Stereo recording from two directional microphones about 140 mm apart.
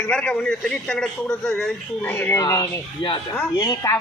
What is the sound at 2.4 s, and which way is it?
Speech, 25° left (ahead or behind).